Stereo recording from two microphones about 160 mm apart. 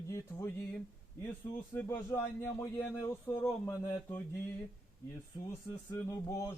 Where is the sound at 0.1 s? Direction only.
15° left (ahead or behind).